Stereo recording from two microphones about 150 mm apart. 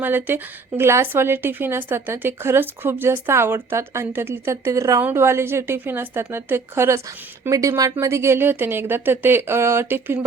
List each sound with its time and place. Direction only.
0.0 s speech: 10° right (ahead or behind)